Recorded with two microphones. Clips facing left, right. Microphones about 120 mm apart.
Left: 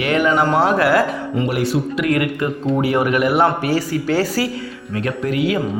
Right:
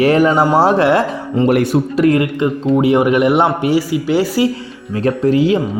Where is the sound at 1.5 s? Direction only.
50° right (ahead or behind).